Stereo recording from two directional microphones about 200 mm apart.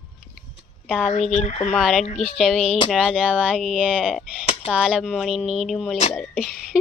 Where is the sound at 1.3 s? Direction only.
35° left (ahead or behind).